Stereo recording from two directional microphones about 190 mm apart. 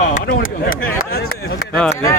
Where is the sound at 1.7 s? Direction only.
5° left (ahead or behind).